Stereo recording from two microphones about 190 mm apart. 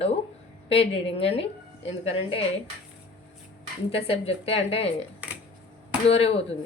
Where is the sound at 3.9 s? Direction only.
30° left (ahead or behind).